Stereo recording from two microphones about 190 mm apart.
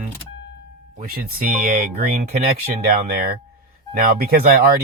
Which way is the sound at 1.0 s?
50° right (ahead or behind).